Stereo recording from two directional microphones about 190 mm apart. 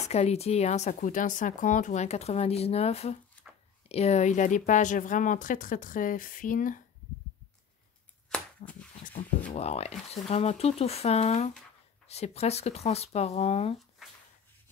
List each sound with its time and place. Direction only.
0.1 s speech: 35° left (ahead or behind)
8.6 s speech: 40° left (ahead or behind)